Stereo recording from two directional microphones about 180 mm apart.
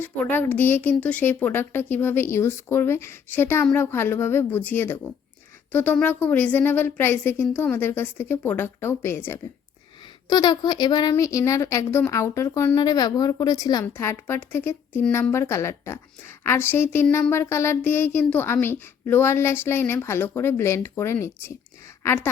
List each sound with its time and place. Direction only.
0.0 s a woman's voice: 10° left (ahead or behind)
10.2 s a woman's voice: 25° left (ahead or behind)